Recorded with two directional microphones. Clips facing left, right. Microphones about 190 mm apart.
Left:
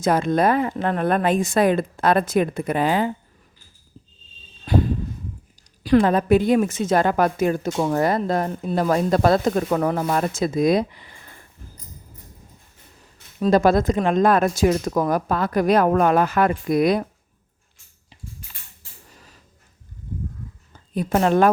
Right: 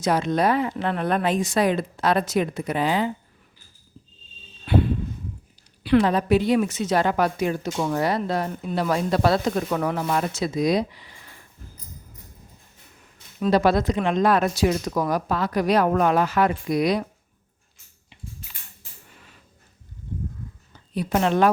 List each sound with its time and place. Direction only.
0.0 s a woman's voice: 50° left (ahead or behind)
4.6 s a sound: 40° left (ahead or behind)
5.8 s a woman's voice: 45° left (ahead or behind)
13.0 s a woman's voice: 40° left (ahead or behind)
19.0 s a sound: 40° left (ahead or behind)
20.7 s a woman's voice: 45° left (ahead or behind)